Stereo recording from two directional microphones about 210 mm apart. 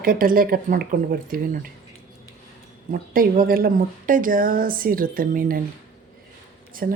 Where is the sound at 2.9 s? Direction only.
40° right (ahead or behind).